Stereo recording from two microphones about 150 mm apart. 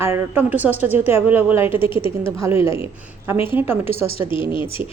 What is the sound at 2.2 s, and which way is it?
A woman's voice, 15° right (ahead or behind).